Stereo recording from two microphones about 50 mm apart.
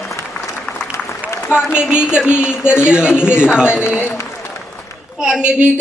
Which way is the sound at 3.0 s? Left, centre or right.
Left.